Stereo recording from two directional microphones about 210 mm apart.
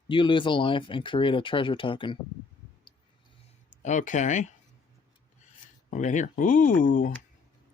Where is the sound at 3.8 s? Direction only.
35° left (ahead or behind).